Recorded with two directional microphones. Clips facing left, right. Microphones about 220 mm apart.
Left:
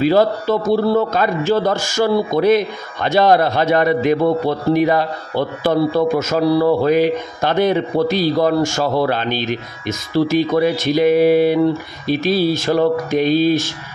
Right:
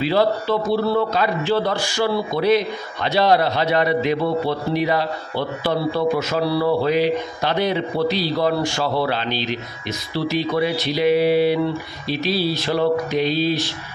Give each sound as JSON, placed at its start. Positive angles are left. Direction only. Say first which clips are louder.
{"t": 0.0, "sound": "a man's voice", "louder": "left 4 dB", "side_deg": 45}